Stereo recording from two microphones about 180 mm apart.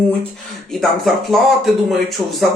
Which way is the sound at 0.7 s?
Centre (ahead or behind).